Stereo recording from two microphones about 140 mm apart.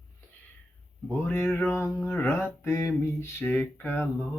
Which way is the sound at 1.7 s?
20° left (ahead or behind).